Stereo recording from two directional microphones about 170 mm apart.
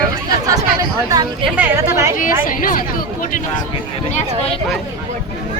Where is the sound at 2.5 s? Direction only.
55° left (ahead or behind).